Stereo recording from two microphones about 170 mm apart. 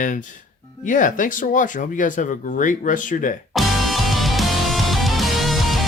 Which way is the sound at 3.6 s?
Centre (ahead or behind).